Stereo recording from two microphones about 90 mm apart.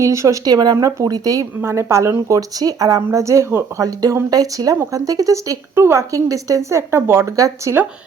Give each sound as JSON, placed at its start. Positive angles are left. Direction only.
{"t": 0.0, "sound": "speech", "side_deg": -35}
{"t": 0.4, "sound": "speech", "side_deg": -45}
{"t": 1.6, "sound": "speech", "side_deg": -30}